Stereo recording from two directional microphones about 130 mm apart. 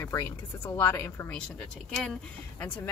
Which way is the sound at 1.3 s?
5° left (ahead or behind).